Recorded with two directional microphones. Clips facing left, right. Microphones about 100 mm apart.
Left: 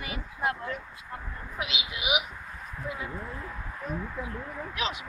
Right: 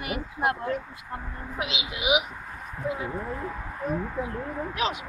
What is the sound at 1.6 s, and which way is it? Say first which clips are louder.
Speech: right 3 dB; 25° right (ahead or behind).